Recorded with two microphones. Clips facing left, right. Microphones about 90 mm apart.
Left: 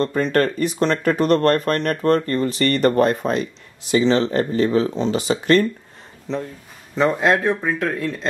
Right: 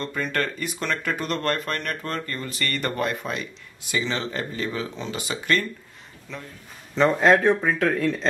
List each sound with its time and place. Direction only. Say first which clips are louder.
0.0 s speech: left 8 dB; 40° left (ahead or behind)
6.3 s speech: left 12 dB; 25° left (ahead or behind)
7.0 s speech: even; 5° left (ahead or behind)